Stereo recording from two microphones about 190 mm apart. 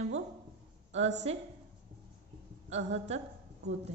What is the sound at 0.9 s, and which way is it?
Speech, 35° right (ahead or behind).